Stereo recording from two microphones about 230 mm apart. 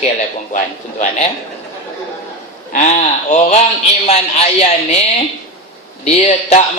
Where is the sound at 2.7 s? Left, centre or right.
Left.